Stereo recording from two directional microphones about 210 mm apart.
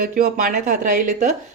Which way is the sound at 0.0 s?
40° right (ahead or behind).